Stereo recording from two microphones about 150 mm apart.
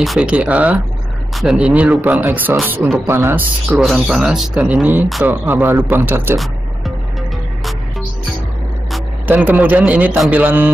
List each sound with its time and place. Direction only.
0.0 s speech: 5° right (ahead or behind)
3.7 s speech: centre (ahead or behind)
6.3 s music: centre (ahead or behind)
9.3 s speech: 15° right (ahead or behind)